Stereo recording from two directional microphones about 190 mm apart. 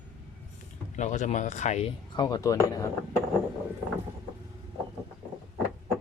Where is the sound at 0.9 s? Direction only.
40° left (ahead or behind).